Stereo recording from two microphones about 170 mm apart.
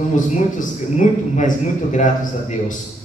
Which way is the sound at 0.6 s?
45° left (ahead or behind).